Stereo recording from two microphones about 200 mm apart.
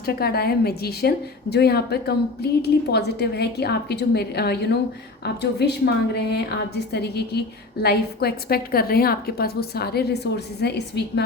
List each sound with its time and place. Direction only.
0.0 s a woman's voice: 50° left (ahead or behind)